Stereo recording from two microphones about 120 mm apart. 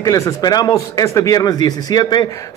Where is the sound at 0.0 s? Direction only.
30° left (ahead or behind).